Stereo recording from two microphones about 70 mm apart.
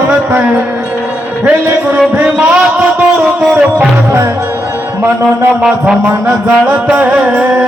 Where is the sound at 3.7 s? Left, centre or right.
Right.